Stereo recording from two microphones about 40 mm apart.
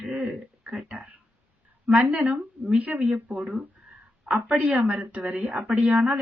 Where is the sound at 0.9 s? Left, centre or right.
Right.